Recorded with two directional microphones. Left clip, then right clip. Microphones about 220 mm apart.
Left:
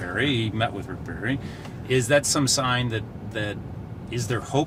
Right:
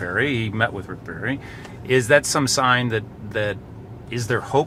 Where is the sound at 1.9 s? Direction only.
40° right (ahead or behind).